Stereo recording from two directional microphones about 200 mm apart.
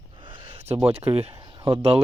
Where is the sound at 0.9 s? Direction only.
30° right (ahead or behind).